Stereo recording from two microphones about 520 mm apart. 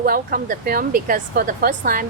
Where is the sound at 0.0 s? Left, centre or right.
Centre.